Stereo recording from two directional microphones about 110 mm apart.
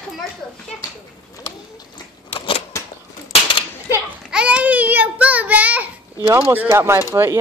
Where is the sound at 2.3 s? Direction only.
55° left (ahead or behind).